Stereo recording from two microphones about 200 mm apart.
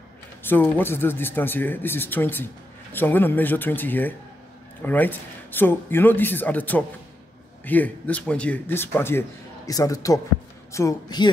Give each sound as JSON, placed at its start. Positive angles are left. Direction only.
{"t": 0.4, "sound": "speech", "side_deg": 10}